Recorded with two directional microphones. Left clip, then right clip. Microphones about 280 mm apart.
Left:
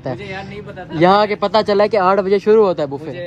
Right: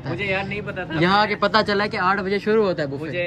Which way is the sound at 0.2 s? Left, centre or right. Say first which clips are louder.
Right 5 dB; centre.